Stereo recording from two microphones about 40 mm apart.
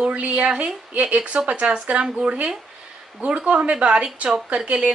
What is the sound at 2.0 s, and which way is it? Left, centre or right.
Speech, centre.